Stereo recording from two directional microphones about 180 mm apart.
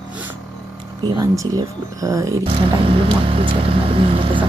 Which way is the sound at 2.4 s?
30° right (ahead or behind).